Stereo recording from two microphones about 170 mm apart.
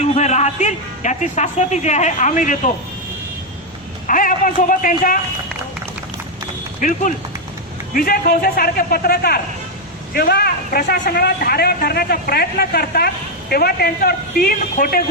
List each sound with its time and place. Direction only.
0.0 s a man's voice: 40° left (ahead or behind)
4.0 s a man's voice: 50° left (ahead or behind)
6.7 s a man's voice: 50° left (ahead or behind)